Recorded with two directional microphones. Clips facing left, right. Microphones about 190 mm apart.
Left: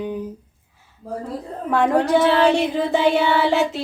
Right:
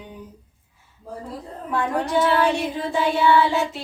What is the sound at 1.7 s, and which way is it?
Speech, 85° left.